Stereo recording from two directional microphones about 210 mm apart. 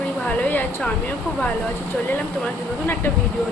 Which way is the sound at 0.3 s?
5° left (ahead or behind).